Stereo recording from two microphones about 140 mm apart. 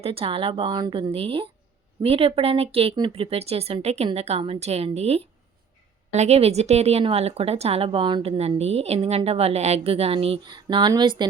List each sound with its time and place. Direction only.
0.0 s a woman's voice: 45° right (ahead or behind)